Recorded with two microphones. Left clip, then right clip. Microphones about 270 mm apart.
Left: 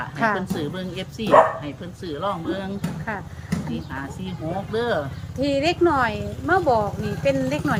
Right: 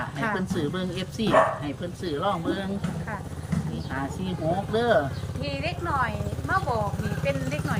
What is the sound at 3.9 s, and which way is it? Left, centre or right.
Speech, centre.